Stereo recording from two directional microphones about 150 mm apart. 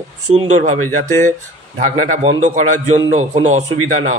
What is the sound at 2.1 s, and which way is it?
A man's voice, 50° right (ahead or behind).